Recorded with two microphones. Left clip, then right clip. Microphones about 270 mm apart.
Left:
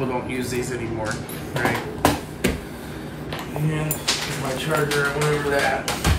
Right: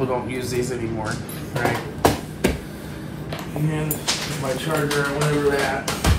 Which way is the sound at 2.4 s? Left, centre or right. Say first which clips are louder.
Right 2 dB; centre.